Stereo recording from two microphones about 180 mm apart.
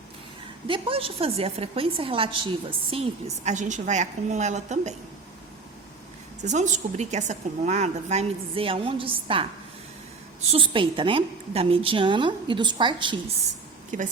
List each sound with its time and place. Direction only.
0.7 s a woman's voice: 30° right (ahead or behind)
6.4 s a woman's voice: 40° right (ahead or behind)
13.9 s a woman's voice: 45° right (ahead or behind)